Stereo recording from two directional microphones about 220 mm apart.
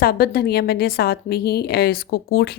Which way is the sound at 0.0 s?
45° left (ahead or behind).